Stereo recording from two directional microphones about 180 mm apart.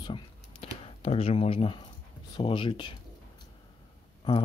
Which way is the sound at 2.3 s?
25° left (ahead or behind).